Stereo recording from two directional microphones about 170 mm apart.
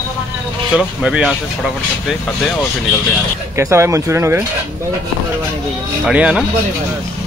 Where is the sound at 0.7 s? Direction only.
5° right (ahead or behind).